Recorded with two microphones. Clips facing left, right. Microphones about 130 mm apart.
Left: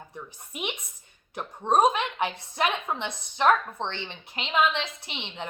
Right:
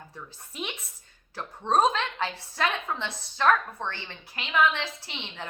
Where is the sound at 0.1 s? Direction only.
15° left (ahead or behind).